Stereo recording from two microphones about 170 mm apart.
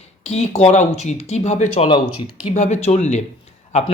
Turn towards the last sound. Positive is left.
turn(degrees=40)  # may be behind; listen again after turning